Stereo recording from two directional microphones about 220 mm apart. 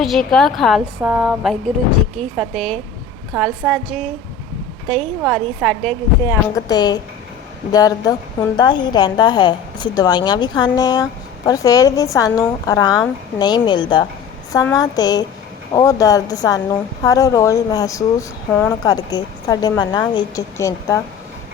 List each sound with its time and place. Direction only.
0.0 s a woman's voice: centre (ahead or behind)
6.2 s a woman's voice: 20° left (ahead or behind)